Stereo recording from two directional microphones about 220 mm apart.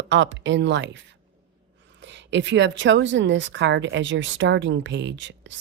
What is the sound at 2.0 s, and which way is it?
A woman's voice, 55° right (ahead or behind).